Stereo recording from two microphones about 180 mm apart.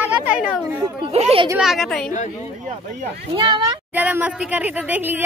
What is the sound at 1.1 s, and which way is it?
Speech, 35° right (ahead or behind).